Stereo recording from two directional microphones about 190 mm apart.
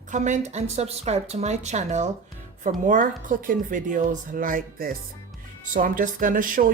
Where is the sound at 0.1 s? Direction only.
40° right (ahead or behind).